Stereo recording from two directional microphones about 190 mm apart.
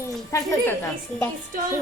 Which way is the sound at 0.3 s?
15° left (ahead or behind).